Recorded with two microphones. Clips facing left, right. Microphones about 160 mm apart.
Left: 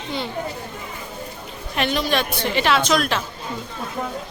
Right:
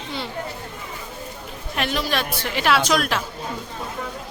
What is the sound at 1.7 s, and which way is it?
Speech, centre (ahead or behind).